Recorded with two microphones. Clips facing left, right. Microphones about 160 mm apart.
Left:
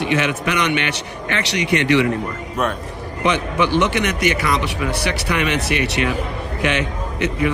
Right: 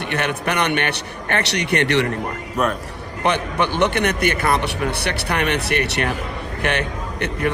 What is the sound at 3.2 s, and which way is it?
A man's voice, 55° right (ahead or behind).